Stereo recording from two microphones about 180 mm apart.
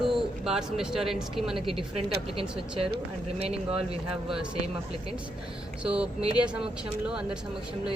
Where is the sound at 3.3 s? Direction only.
35° right (ahead or behind).